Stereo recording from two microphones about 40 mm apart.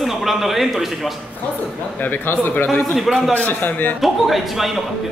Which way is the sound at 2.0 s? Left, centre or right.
Left.